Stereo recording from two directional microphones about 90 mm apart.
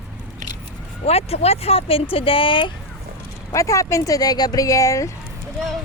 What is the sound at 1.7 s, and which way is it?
A child's voice, 90° left.